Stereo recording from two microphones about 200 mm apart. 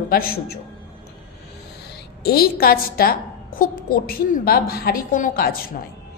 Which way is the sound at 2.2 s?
50° left (ahead or behind).